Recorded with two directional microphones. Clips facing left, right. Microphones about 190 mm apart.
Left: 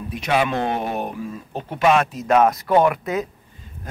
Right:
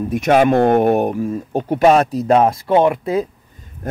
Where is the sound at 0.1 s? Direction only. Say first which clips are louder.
Right 8 dB; 45° right (ahead or behind); by 3.3 s 30° right (ahead or behind).